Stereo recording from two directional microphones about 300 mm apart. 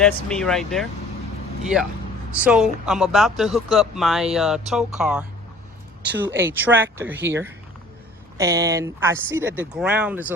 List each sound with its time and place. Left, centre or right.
0.0 s speech: centre
2.4 s speech: centre